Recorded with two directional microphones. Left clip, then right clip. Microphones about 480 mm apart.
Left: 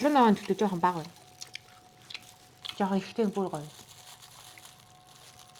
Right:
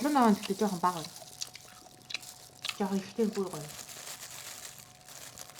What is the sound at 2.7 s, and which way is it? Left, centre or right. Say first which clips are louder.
Speech: left 4 dB; left.